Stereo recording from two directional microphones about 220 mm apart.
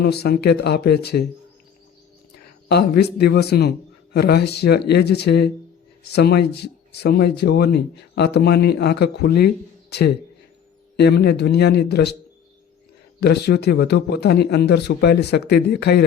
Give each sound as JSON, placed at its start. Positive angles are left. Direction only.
{"t": 0.0, "sound": "speech", "side_deg": 50}
{"t": 2.6, "sound": "speech", "side_deg": 45}
{"t": 10.9, "sound": "speech", "side_deg": 50}
{"t": 13.1, "sound": "speech", "side_deg": 50}